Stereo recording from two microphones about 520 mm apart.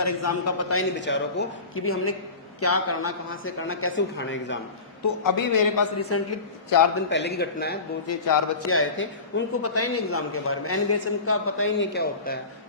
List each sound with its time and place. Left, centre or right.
0.0 s a man's voice: left
5.0 s a man's voice: left
6.0 s a man's voice: left